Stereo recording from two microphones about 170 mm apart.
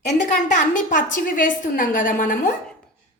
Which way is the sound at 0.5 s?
50° left (ahead or behind).